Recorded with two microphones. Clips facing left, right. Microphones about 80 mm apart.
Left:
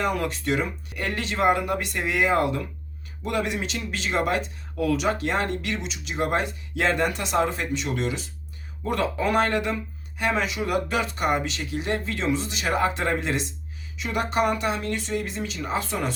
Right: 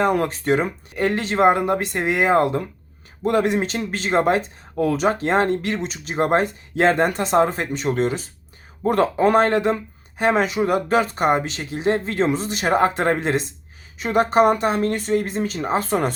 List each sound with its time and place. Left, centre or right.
0.0 s speech: right